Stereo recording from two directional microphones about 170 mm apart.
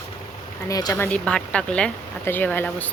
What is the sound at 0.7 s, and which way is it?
Speech, 20° left (ahead or behind).